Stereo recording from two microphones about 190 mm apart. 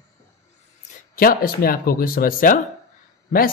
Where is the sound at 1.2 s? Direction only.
50° left (ahead or behind).